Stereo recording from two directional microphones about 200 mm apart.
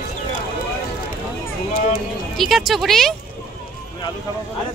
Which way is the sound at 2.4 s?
Centre (ahead or behind).